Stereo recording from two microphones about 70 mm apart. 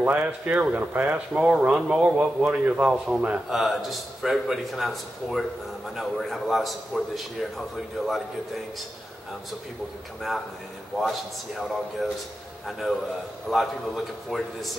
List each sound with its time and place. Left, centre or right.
0.0 s speech: right
3.4 s a man's voice: centre
11.0 s a man's voice: centre